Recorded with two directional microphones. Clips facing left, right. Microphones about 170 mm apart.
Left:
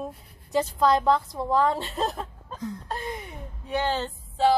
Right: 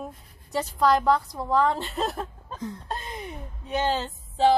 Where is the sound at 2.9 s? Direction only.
20° right (ahead or behind).